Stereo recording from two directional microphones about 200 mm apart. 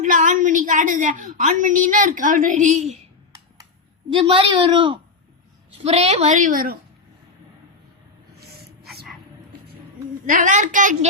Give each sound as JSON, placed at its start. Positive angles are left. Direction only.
{"t": 0.0, "sound": "a woman's voice", "side_deg": -40}
{"t": 4.1, "sound": "a woman's voice", "side_deg": -25}
{"t": 10.2, "sound": "a woman's voice", "side_deg": -40}